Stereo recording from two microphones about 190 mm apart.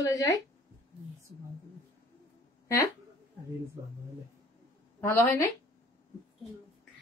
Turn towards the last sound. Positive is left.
turn(degrees=10)  # may be behind; listen again after turning